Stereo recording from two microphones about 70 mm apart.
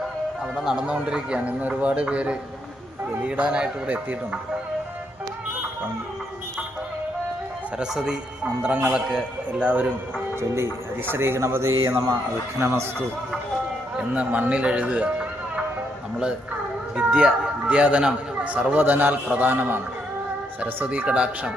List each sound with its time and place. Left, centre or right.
0.5 s a man's voice: centre
7.8 s a man's voice: centre
8.6 s a man's voice: right
9.5 s a man's voice: right
11.1 s a man's voice: right
13.9 s a man's voice: centre
16.9 s a man's voice: centre; by 19.8 s right
20.9 s a man's voice: centre